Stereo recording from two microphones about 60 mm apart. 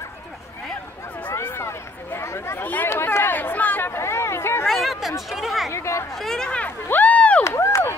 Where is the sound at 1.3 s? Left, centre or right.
Left.